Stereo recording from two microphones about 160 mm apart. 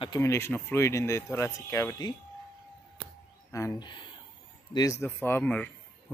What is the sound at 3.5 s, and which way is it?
Speech, 20° left (ahead or behind).